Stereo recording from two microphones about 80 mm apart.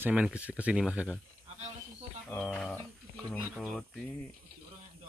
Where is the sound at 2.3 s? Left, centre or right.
Centre.